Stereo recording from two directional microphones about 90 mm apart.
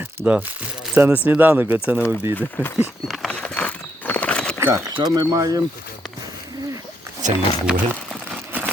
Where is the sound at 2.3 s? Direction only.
20° left (ahead or behind).